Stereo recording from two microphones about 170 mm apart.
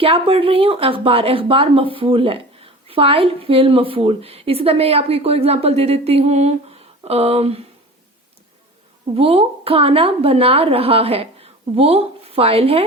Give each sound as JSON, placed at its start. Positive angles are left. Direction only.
{"t": 0.0, "sound": "speech", "side_deg": -35}
{"t": 9.1, "sound": "speech", "side_deg": -35}